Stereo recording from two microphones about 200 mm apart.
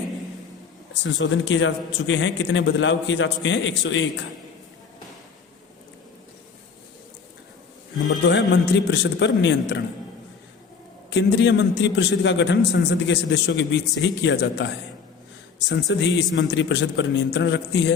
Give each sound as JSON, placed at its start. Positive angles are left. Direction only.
{"t": 1.0, "sound": "a man's voice", "side_deg": 70}
{"t": 8.3, "sound": "a man's voice", "side_deg": 60}
{"t": 11.1, "sound": "a man's voice", "side_deg": 60}
{"t": 15.9, "sound": "a man's voice", "side_deg": 65}